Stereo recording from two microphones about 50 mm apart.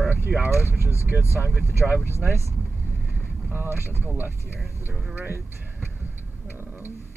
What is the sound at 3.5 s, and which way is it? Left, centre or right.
Speech, right.